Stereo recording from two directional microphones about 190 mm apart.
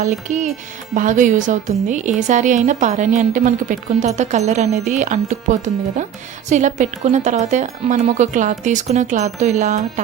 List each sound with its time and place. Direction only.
0.0 s a woman's voice: 40° right (ahead or behind)